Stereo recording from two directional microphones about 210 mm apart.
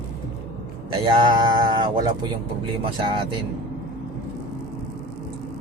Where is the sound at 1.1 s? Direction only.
20° right (ahead or behind).